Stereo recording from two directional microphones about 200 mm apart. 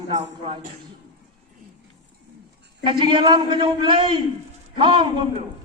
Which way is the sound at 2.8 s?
25° right (ahead or behind).